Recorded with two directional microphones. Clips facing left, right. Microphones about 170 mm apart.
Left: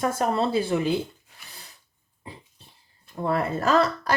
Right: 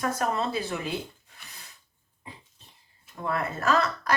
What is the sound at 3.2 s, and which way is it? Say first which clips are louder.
Speech: left 5 dB; 30° left (ahead or behind).